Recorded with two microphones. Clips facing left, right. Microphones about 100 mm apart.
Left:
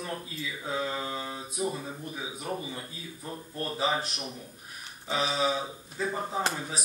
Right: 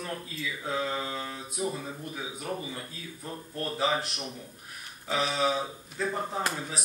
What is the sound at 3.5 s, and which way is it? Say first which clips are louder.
Speech: right 1 dB; 15° left (ahead or behind).